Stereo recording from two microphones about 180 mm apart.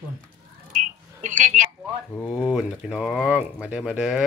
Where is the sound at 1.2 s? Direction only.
45° right (ahead or behind).